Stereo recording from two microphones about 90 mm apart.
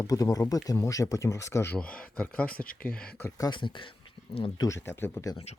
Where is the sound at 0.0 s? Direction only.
40° left (ahead or behind).